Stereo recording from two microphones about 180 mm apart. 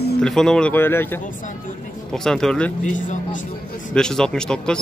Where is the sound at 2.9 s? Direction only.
45° left (ahead or behind).